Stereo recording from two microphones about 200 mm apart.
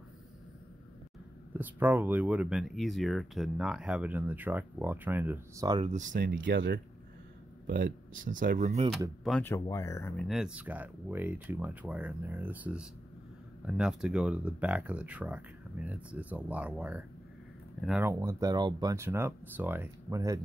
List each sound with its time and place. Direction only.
1.6 s speech: 10° right (ahead or behind)
5.7 s speech: 30° right (ahead or behind)
6.2 s speech: 50° right (ahead or behind); by 8.9 s 35° right (ahead or behind)
9.2 s speech: 5° left (ahead or behind)
10.1 s speech: centre (ahead or behind); by 20.3 s 15° right (ahead or behind)